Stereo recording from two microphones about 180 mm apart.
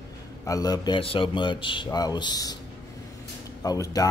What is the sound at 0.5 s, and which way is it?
Speech, 20° left (ahead or behind).